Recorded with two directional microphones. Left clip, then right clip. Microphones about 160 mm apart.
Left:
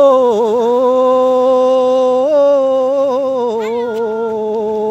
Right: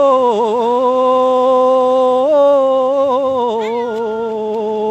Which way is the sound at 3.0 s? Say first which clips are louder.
Even; 30° right (ahead or behind).